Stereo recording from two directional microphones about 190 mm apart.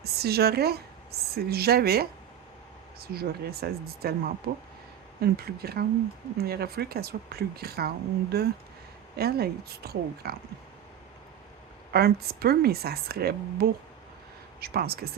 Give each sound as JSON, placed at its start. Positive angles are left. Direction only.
{"t": 0.0, "sound": "a woman's voice", "side_deg": -55}
{"t": 11.9, "sound": "speech", "side_deg": -55}